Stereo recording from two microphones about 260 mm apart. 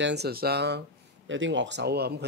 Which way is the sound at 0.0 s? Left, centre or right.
Right.